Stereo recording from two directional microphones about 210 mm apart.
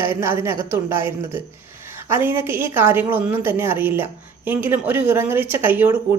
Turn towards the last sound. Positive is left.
turn(degrees=-10)  # may be behind; listen again after turning